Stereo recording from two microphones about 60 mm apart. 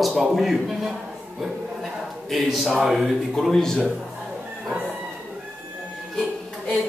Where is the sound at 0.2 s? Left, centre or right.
Centre.